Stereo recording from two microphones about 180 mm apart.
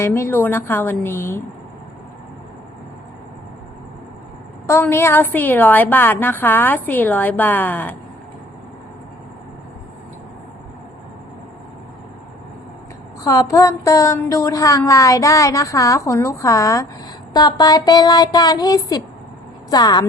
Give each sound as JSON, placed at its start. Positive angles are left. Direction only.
{"t": 0.0, "sound": "speech", "side_deg": 15}
{"t": 4.6, "sound": "speech", "side_deg": 15}
{"t": 13.2, "sound": "speech", "side_deg": 20}